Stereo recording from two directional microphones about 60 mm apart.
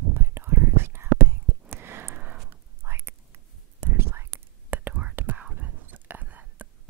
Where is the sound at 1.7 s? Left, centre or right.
Right.